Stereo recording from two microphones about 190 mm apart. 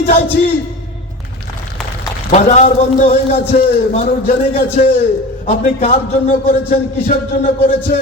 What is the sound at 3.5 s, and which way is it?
Music, 45° left (ahead or behind).